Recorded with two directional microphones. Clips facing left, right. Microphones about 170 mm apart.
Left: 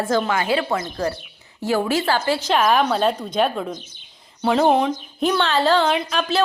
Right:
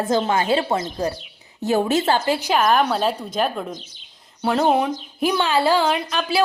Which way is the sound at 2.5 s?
Centre (ahead or behind).